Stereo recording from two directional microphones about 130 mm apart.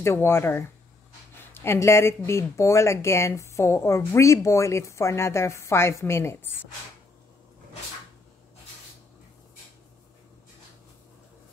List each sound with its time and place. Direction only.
0.0 s speech: 20° left (ahead or behind)